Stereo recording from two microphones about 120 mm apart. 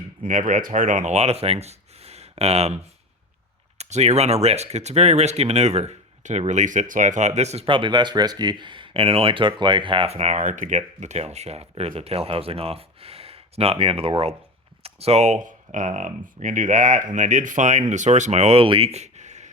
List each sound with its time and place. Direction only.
0.3 s speech: 90° right; by 2.7 s 60° right (ahead or behind)
3.8 s speech: 70° right (ahead or behind)
7.6 s speech: 45° right (ahead or behind); by 19.5 s 75° right (ahead or behind)